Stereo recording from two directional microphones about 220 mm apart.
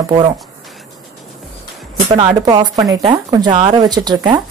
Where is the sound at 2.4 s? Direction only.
20° right (ahead or behind).